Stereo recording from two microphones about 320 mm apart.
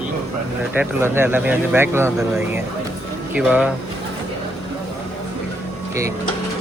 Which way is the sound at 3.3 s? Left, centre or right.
Centre.